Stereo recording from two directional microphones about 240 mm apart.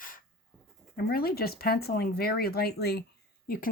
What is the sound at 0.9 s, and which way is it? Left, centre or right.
Speech, left.